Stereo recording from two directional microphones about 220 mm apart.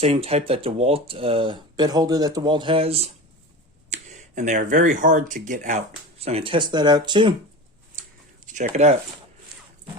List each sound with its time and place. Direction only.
0.0 s speech: 25° right (ahead or behind)
8.5 s speech: 30° right (ahead or behind)